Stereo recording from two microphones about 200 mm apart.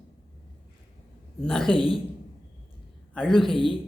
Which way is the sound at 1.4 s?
5° left (ahead or behind).